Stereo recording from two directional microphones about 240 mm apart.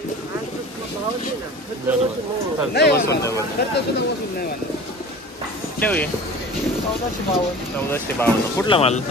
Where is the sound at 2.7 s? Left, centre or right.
Left.